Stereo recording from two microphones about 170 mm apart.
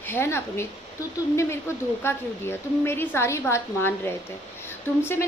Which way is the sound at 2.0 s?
15° left (ahead or behind).